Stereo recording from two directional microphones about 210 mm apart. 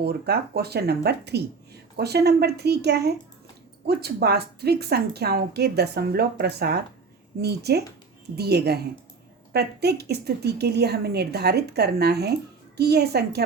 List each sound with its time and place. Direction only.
0.0 s a woman's voice: 50° right (ahead or behind)